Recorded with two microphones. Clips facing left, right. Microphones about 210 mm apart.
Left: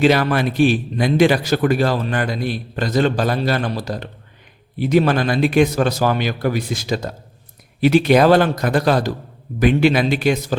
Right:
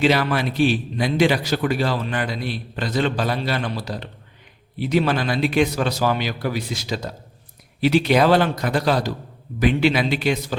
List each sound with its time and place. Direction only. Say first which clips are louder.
0.0 s a man's voice: left 4 dB; 45° left (ahead or behind)